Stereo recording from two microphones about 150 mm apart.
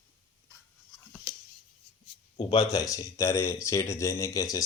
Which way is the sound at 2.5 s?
25° left (ahead or behind).